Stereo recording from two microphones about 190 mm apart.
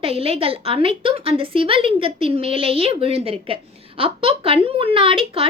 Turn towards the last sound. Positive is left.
turn(degrees=-30)  # may be behind; listen again after turning